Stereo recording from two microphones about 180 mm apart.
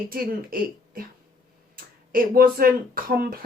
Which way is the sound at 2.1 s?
55° right (ahead or behind).